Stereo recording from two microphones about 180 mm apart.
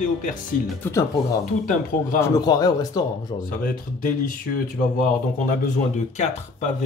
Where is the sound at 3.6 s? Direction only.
50° left (ahead or behind).